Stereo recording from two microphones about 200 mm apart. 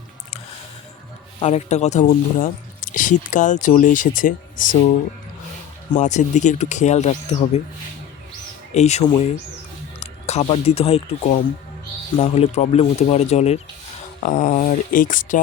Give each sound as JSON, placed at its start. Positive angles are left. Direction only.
{"t": 1.4, "sound": "speech", "side_deg": 35}
{"t": 6.0, "sound": "speech", "side_deg": 35}
{"t": 8.7, "sound": "speech", "side_deg": 35}